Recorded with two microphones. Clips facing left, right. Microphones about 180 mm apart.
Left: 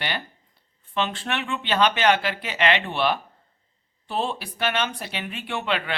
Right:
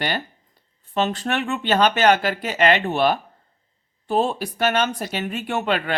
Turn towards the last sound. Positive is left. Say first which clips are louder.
# right 4 dB
turn(degrees=-45)  # may be behind; listen again after turning